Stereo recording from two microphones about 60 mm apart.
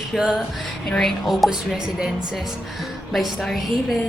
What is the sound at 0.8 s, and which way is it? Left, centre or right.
Speech, centre.